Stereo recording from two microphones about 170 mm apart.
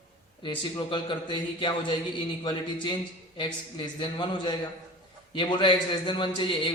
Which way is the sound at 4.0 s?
30° left (ahead or behind).